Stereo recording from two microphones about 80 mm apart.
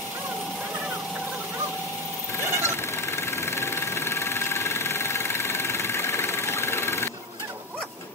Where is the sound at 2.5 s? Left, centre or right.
Left.